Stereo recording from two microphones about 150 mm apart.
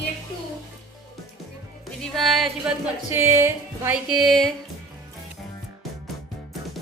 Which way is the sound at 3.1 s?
15° right (ahead or behind).